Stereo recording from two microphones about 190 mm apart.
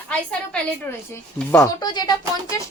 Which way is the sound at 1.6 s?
20° left (ahead or behind).